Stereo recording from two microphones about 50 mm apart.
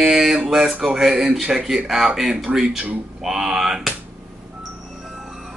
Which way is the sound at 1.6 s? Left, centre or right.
Right.